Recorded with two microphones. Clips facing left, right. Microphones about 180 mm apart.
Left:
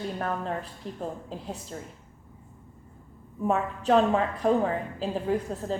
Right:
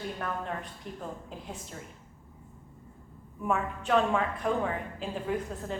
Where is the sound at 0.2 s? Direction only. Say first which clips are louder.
Left 4 dB; 40° left (ahead or behind).